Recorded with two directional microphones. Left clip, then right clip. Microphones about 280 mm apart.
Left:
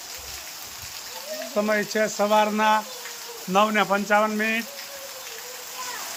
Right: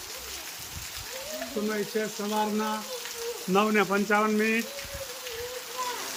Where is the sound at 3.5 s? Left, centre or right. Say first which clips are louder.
Left 4 dB; centre.